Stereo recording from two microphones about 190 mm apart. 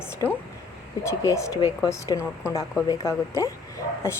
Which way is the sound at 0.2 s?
20° left (ahead or behind).